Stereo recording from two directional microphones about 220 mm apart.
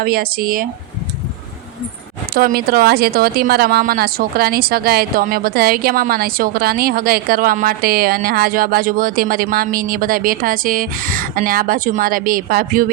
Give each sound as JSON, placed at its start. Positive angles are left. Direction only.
{"t": 0.0, "sound": "a woman's voice", "side_deg": -40}
{"t": 2.3, "sound": "a woman's voice", "side_deg": -40}